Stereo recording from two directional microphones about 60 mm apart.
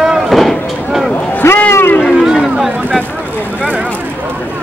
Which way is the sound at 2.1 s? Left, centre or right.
Centre.